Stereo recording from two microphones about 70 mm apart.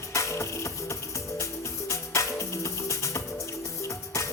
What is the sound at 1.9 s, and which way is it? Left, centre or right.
Music, left.